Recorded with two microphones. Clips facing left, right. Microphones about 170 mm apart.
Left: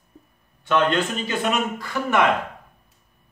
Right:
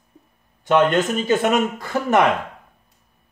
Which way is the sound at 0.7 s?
45° right (ahead or behind).